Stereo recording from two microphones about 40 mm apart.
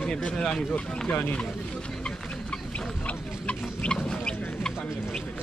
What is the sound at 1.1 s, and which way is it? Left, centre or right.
Speech, left.